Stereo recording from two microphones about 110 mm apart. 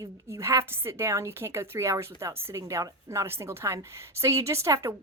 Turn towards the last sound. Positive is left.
turn(degrees=-25)  # may be behind; listen again after turning